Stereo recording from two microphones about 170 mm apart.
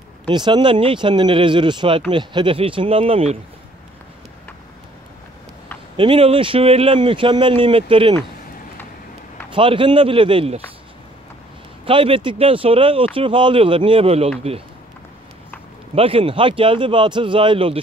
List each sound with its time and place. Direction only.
0.3 s speech: 25° right (ahead or behind)
5.9 s speech: 30° right (ahead or behind)
9.5 s speech: 30° right (ahead or behind)
11.8 s speech: 30° right (ahead or behind)
15.9 s speech: 35° right (ahead or behind)